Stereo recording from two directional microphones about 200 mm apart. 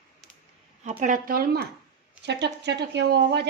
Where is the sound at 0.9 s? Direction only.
40° right (ahead or behind).